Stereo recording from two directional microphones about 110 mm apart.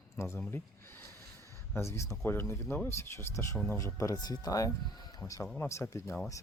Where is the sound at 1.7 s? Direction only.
25° left (ahead or behind).